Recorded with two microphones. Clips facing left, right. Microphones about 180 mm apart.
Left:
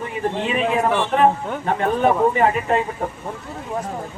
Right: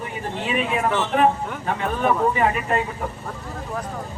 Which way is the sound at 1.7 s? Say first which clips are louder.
Left 4 dB; 35° left (ahead or behind).